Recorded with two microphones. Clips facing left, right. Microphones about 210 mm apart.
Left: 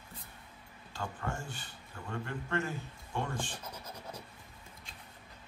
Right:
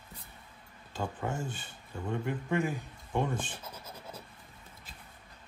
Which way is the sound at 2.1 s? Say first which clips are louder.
Right 4 dB; 15° right (ahead or behind).